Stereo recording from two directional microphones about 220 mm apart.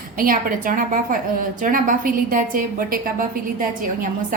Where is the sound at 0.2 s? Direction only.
40° right (ahead or behind).